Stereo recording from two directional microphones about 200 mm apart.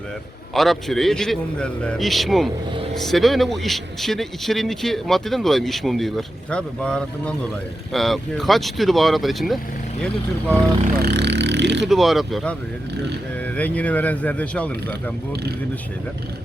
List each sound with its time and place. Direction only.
0.5 s a man's voice: centre (ahead or behind)
10.9 s speech: 55° right (ahead or behind)
11.9 s a man's voice: centre (ahead or behind)
13.6 s speech: 5° left (ahead or behind)